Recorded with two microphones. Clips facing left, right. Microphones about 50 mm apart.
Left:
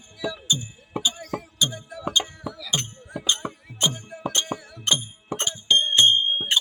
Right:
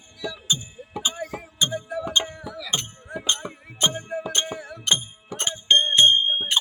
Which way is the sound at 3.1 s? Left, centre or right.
Right.